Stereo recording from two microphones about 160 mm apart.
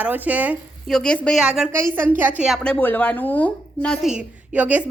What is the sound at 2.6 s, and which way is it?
A woman's voice, 10° left (ahead or behind).